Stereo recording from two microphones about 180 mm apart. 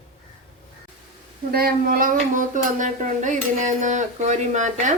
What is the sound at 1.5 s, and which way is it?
A woman's voice, 55° right (ahead or behind).